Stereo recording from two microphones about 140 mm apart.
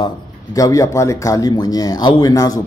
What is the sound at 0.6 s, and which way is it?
Speech, 25° left (ahead or behind).